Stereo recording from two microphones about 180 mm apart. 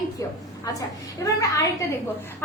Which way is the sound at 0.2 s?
20° left (ahead or behind).